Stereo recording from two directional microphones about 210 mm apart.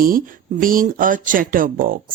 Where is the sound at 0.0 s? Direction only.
40° right (ahead or behind).